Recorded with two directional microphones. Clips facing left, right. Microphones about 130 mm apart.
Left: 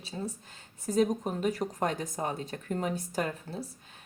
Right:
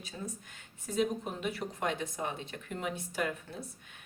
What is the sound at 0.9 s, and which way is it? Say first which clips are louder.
A woman's voice: left 5 dB; 40° left (ahead or behind).